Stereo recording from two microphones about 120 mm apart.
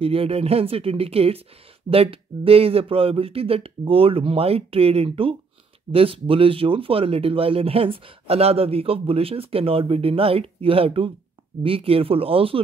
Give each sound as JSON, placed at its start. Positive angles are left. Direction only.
{"t": 0.0, "sound": "speech", "side_deg": -50}